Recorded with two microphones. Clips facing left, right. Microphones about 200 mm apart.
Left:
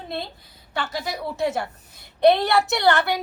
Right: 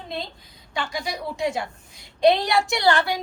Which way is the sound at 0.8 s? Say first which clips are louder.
Left 1 dB; 20° left (ahead or behind).